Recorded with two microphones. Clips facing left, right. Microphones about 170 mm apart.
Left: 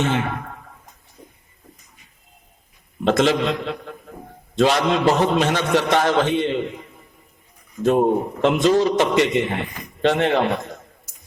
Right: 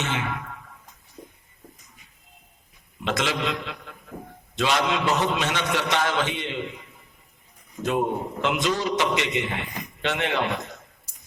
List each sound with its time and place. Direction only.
0.0 s speech: 50° left (ahead or behind)
3.0 s a man's voice: 45° left (ahead or behind)